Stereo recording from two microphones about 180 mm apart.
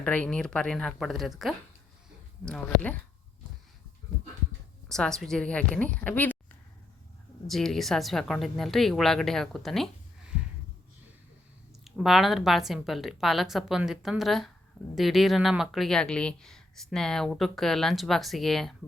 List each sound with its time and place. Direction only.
0.0 s speech: 5° left (ahead or behind)
4.9 s speech: 5° left (ahead or behind)
7.4 s speech: centre (ahead or behind)
11.9 s speech: centre (ahead or behind)